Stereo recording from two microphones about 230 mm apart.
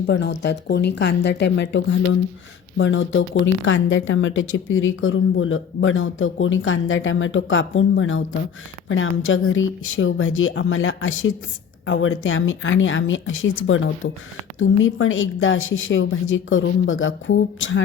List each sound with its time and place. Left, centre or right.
0.1 s speech: left